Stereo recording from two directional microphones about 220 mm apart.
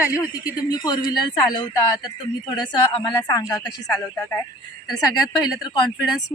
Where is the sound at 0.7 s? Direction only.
20° left (ahead or behind).